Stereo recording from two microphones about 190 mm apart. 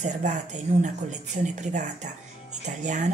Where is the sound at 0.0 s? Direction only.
40° right (ahead or behind).